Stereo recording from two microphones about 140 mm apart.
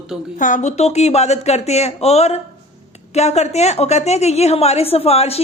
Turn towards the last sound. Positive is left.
turn(degrees=45)  # may be behind; listen again after turning